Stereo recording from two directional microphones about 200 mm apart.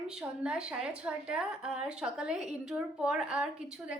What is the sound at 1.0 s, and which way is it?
A woman's voice, 5° right (ahead or behind).